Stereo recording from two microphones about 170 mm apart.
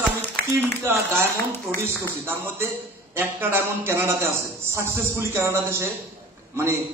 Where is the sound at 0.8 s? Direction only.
15° right (ahead or behind).